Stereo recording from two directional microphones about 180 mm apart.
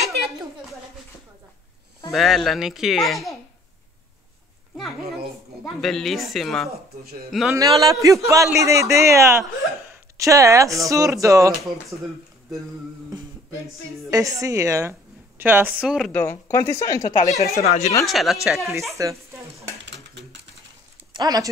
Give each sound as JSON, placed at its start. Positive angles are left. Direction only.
{"t": 2.0, "sound": "speech", "side_deg": 0}
{"t": 5.6, "sound": "speech", "side_deg": 5}
{"t": 7.5, "sound": "a man's voice", "side_deg": -20}
{"t": 14.1, "sound": "a woman's voice", "side_deg": -20}
{"t": 16.1, "sound": "speech", "side_deg": 10}
{"t": 17.6, "sound": "speech", "side_deg": 40}
{"t": 18.0, "sound": "speech", "side_deg": 0}
{"t": 18.9, "sound": "a sound", "side_deg": -15}
{"t": 19.8, "sound": "a sound", "side_deg": -80}
{"t": 21.1, "sound": "speech", "side_deg": -20}